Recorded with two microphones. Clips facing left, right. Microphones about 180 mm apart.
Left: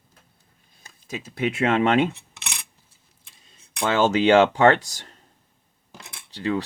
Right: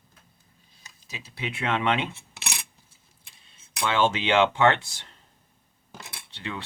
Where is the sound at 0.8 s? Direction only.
50° left (ahead or behind).